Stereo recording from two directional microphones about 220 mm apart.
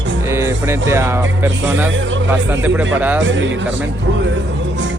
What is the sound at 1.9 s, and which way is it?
Speech, 60° right (ahead or behind).